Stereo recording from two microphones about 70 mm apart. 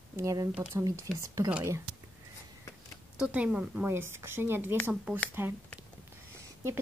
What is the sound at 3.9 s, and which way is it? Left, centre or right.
Speech, right.